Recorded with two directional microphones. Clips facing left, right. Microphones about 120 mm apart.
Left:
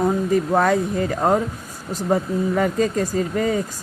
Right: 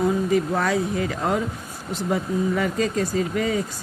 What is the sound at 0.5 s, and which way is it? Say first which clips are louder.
Speech: left 4 dB; 50° left (ahead or behind).